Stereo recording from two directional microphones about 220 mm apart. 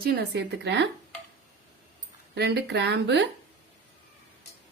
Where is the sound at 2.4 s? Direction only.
50° right (ahead or behind).